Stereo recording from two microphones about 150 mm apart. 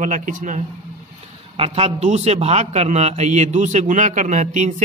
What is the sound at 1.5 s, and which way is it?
A man's voice, 40° right (ahead or behind).